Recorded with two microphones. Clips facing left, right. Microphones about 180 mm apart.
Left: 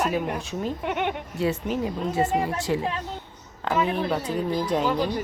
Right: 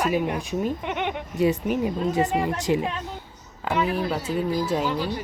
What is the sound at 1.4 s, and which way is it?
Speech, 15° right (ahead or behind).